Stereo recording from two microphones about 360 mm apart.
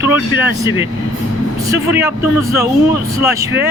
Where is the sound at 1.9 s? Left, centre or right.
Centre.